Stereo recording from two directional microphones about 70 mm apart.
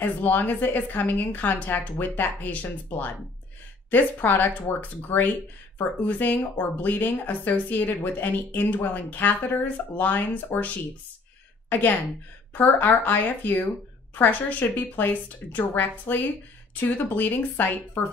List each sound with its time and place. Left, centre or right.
0.0 s speech: left
12.5 s speech: left